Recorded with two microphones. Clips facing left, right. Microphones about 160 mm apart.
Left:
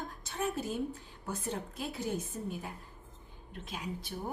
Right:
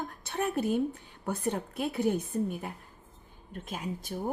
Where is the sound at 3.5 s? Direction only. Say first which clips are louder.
Right 4 dB; 50° right (ahead or behind).